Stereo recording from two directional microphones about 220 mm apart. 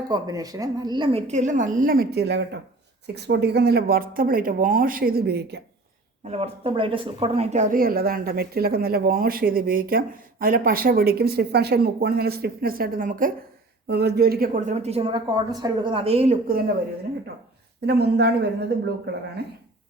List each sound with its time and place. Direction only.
0.1 s a woman's voice: 15° right (ahead or behind); by 5.6 s 50° right (ahead or behind)
6.2 s a woman's voice: 25° right (ahead or behind)
17.8 s speech: 50° right (ahead or behind)